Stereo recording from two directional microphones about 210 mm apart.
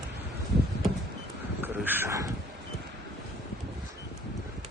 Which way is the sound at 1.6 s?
10° right (ahead or behind).